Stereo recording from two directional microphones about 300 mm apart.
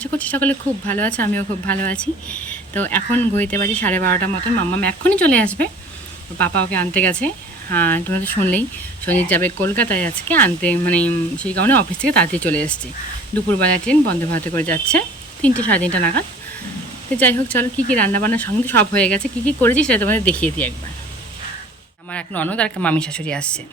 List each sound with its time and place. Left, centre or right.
0.0 s speech: centre
1.3 s speech: right
1.7 s speech: centre
22.1 s speech: centre